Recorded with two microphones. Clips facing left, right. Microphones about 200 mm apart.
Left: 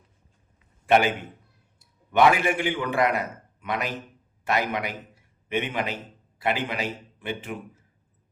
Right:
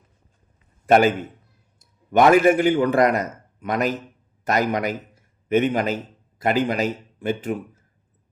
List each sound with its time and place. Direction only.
0.9 s a man's voice: 45° right (ahead or behind)